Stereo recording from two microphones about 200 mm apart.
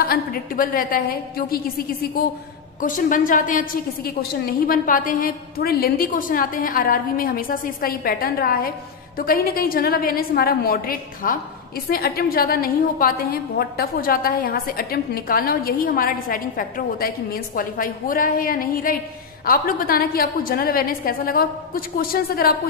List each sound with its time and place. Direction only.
0.0 s a woman's voice: 45° left (ahead or behind)